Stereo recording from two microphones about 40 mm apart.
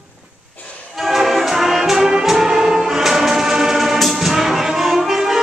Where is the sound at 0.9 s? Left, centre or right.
Centre.